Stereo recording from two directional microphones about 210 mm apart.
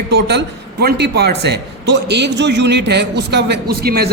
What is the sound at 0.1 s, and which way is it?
A man's voice, 50° right (ahead or behind).